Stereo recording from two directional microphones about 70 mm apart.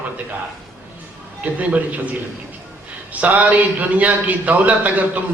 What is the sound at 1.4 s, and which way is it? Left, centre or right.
Speech, right.